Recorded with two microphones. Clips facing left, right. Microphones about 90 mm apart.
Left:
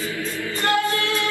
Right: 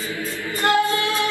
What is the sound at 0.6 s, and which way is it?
Singing, 20° right (ahead or behind).